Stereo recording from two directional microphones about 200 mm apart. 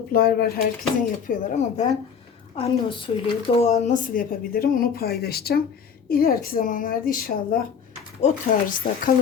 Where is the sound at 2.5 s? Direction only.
25° left (ahead or behind).